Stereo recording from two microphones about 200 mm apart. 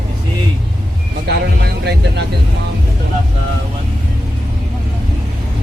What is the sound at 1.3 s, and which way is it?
Vehicle, 55° right (ahead or behind).